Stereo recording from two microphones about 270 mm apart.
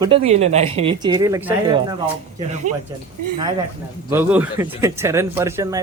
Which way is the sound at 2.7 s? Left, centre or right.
Right.